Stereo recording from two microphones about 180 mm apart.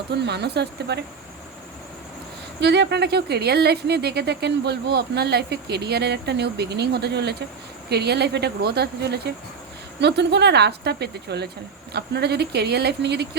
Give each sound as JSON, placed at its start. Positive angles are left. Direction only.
{"t": 0.3, "sound": "a woman's voice", "side_deg": -65}
{"t": 2.6, "sound": "a woman's voice", "side_deg": -70}